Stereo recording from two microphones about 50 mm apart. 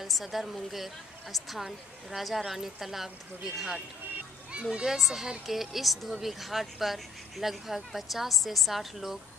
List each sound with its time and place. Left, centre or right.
0.0 s speech: centre
4.5 s a sound: centre
4.8 s speech: centre